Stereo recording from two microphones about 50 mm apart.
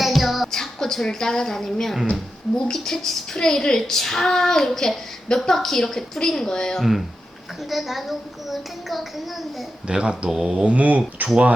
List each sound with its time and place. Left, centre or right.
0.0 s music: centre
0.5 s a woman's voice: centre
7.7 s a child's voice: centre
9.8 s speech: centre